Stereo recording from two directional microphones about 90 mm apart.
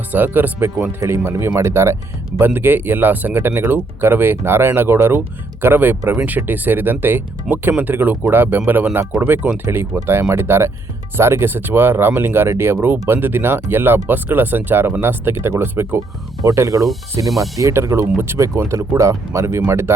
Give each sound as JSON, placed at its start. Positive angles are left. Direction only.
{"t": 0.1, "sound": "speech", "side_deg": -20}
{"t": 16.4, "sound": "speech", "side_deg": -40}
{"t": 17.2, "sound": "speech", "side_deg": 0}
{"t": 17.6, "sound": "speech", "side_deg": -35}